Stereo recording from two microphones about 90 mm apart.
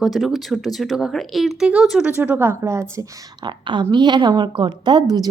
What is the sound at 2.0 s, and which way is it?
A woman's voice, 20° right (ahead or behind).